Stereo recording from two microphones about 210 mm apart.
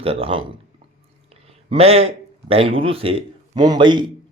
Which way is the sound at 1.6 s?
30° right (ahead or behind).